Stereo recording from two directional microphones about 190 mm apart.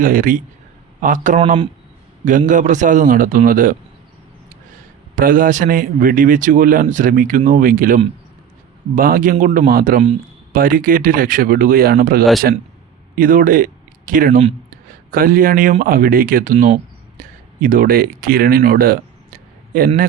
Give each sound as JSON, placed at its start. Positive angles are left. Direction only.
{"t": 0.0, "sound": "speech", "side_deg": -45}
{"t": 2.5, "sound": "speech", "side_deg": -40}
{"t": 5.1, "sound": "speech", "side_deg": -50}